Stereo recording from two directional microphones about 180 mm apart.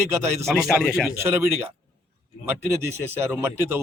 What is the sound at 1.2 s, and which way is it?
Speech, 15° right (ahead or behind).